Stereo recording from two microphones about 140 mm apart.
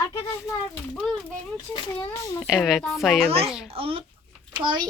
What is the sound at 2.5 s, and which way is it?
Speech, 5° right (ahead or behind).